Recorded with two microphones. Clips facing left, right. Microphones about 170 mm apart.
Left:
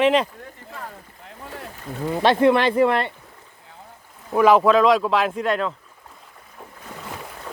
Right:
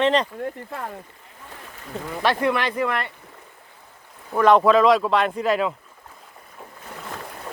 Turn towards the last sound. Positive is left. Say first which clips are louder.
# right 1 dB
turn(degrees=-5)  # may be behind; listen again after turning